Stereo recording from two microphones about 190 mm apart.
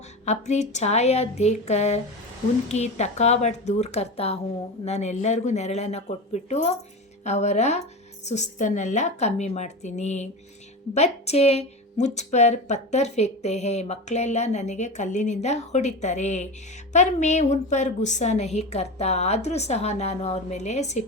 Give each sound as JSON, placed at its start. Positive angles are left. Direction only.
{"t": 0.3, "sound": "a woman's voice", "side_deg": 35}